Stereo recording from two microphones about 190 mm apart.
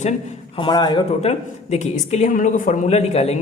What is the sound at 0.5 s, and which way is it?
A man's voice, 25° left (ahead or behind).